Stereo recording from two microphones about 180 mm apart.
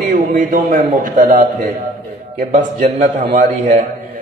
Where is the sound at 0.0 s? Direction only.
50° right (ahead or behind).